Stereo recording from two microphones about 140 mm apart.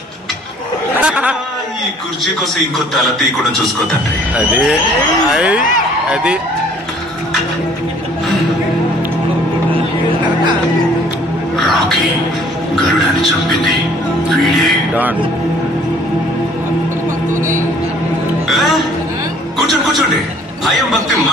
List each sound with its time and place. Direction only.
0.9 s chatter: 10° right (ahead or behind)
5.3 s speech: 5° right (ahead or behind)
11.5 s music: centre (ahead or behind)
13.2 s speech: centre (ahead or behind)
14.3 s music: centre (ahead or behind)
17.3 s music: 65° right (ahead or behind)
18.5 s music: centre (ahead or behind)